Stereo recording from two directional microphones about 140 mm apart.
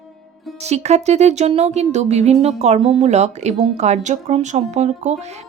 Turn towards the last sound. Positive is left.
turn(degrees=-55)  # may be behind; listen again after turning